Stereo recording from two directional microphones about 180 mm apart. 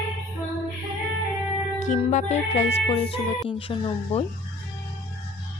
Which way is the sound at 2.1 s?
35° left (ahead or behind).